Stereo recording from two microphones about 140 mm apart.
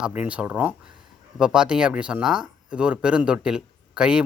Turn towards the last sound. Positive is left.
turn(degrees=-5)  # may be behind; listen again after turning